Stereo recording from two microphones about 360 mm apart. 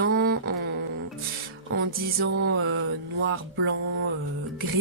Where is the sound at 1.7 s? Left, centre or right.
Right.